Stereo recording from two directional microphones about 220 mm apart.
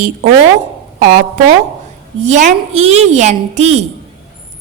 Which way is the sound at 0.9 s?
35° right (ahead or behind).